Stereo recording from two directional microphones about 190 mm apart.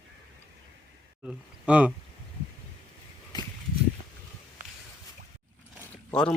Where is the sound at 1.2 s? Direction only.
5° right (ahead or behind).